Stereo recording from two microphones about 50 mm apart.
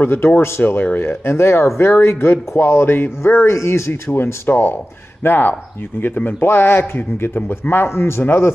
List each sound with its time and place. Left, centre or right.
0.0 s a man's voice: left
1.3 s a man's voice: left
3.5 s a man's voice: left
6.5 s a man's voice: left